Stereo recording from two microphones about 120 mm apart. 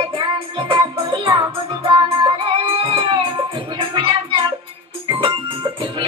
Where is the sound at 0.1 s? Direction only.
45° right (ahead or behind).